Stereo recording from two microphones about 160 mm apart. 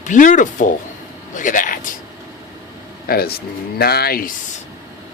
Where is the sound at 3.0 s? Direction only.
70° left (ahead or behind).